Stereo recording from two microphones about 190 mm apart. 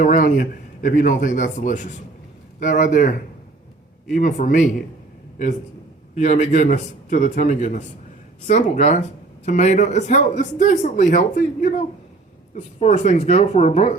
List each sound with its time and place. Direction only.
0.0 s a man's voice: 45° left (ahead or behind)
6.1 s speech: 35° left (ahead or behind)